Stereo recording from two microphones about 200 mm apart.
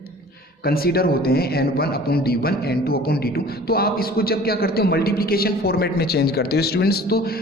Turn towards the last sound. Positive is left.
turn(degrees=50)  # may be behind; listen again after turning